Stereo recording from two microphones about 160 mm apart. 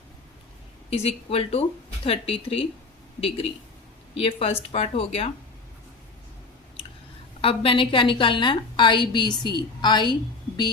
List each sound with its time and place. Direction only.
0.9 s speech: 40° left (ahead or behind)
7.4 s a woman's voice: 35° left (ahead or behind)